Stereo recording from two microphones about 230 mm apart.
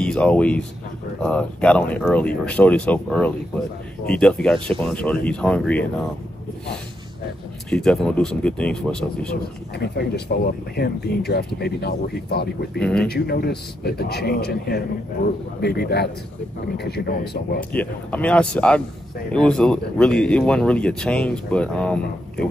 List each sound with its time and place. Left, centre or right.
0.0 s speech: centre
7.7 s speech: centre
9.8 s speech: left
12.8 s speech: centre
13.1 s speech: left
17.6 s speech: centre